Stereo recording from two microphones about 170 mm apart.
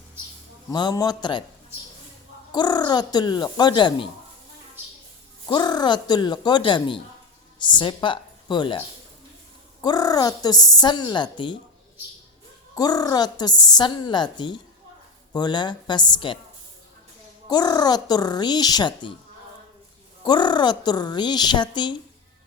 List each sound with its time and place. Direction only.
0.7 s a woman's voice: 25° left (ahead or behind)
2.5 s a woman's voice: 25° left (ahead or behind)
5.5 s a woman's voice: 25° left (ahead or behind)
9.8 s a woman's voice: 20° left (ahead or behind)
12.7 s a woman's voice: 20° left (ahead or behind)
17.5 s a woman's voice: 25° left (ahead or behind)
20.2 s a woman's voice: 25° left (ahead or behind)